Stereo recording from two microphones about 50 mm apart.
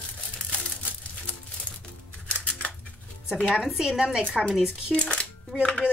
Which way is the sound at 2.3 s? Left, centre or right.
Left.